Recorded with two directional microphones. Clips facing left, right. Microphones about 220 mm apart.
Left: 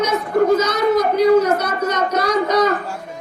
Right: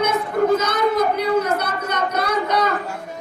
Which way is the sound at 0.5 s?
55° right (ahead or behind).